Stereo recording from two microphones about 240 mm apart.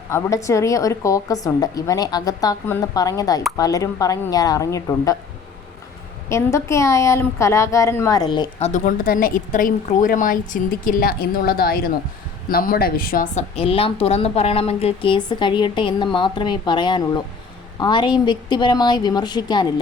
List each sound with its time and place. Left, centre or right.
0.1 s a woman's voice: centre
6.2 s a woman's voice: centre; by 13.4 s left
13.6 s a woman's voice: left